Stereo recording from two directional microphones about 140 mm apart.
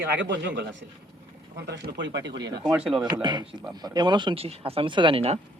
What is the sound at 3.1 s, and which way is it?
Speech, 30° right (ahead or behind).